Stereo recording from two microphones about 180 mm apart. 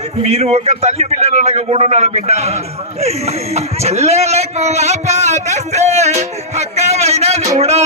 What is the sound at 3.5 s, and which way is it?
A man's voice, 35° right (ahead or behind).